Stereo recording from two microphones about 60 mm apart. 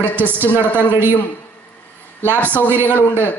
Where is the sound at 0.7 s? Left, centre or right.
Right.